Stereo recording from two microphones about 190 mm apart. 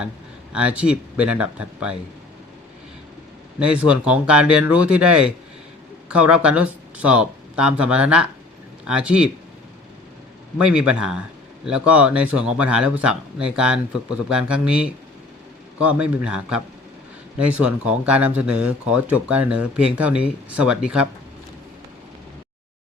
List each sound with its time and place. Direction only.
0.5 s speech: 5° right (ahead or behind)
3.6 s speech: 5° right (ahead or behind)
10.7 s speech: 5° right (ahead or behind)